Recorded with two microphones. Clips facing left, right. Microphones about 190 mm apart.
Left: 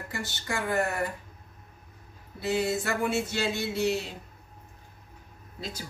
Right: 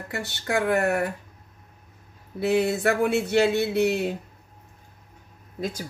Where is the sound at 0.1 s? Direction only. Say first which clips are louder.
Right 8 dB; 60° right (ahead or behind).